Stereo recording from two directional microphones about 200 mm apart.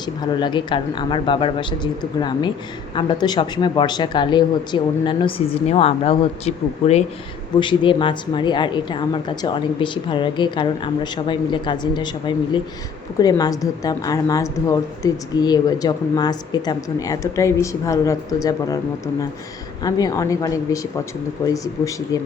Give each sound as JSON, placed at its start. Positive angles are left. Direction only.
{"t": 0.0, "sound": "a woman's voice", "side_deg": 20}